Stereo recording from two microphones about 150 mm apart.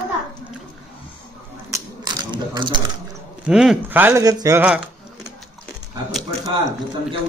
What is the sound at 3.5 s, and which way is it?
Speech, 5° right (ahead or behind).